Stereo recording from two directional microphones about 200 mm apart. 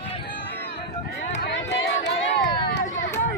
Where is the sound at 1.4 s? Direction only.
65° left (ahead or behind).